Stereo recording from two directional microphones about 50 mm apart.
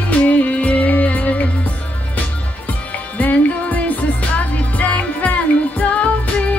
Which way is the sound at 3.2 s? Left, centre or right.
Left.